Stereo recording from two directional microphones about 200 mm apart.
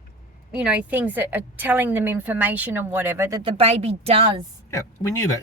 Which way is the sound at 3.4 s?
30° right (ahead or behind).